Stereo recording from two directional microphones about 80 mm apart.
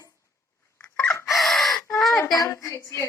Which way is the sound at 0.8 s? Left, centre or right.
Centre.